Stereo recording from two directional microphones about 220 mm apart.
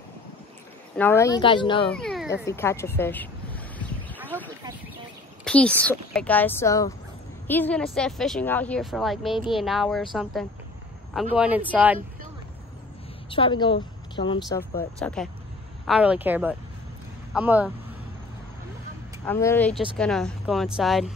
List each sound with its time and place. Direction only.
0.9 s speech: 10° left (ahead or behind)
1.9 s speech: 5° left (ahead or behind)
4.3 s a sound: 10° right (ahead or behind)
5.4 s speech: 5° left (ahead or behind)
11.1 s speech: 5° right (ahead or behind)
13.3 s speech: 20° left (ahead or behind)
14.8 s speech: 5° left (ahead or behind)
15.9 s speech: 5° right (ahead or behind)
19.2 s speech: 10° left (ahead or behind)